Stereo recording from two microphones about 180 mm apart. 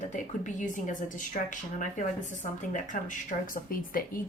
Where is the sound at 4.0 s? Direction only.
55° left (ahead or behind).